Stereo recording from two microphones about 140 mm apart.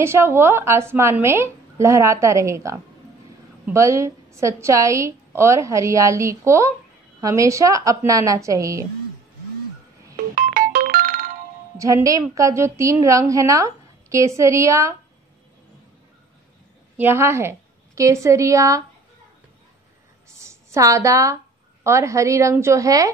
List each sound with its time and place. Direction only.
0.0 s a woman's voice: 20° right (ahead or behind)
10.3 s music: 90° right
11.7 s a woman's voice: 25° right (ahead or behind)
16.9 s a woman's voice: 15° right (ahead or behind)
20.4 s a woman's voice: 20° right (ahead or behind)